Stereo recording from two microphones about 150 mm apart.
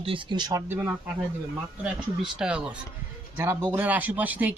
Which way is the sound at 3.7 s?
10° right (ahead or behind).